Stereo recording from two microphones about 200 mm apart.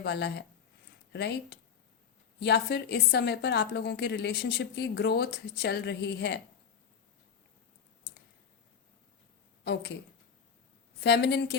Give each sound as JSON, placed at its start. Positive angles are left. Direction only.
{"t": 0.0, "sound": "a woman's voice", "side_deg": 55}
{"t": 11.0, "sound": "a woman's voice", "side_deg": 55}